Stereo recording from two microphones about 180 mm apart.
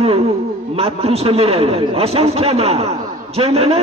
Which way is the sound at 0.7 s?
35° right (ahead or behind).